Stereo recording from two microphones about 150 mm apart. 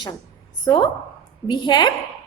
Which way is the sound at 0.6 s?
30° left (ahead or behind).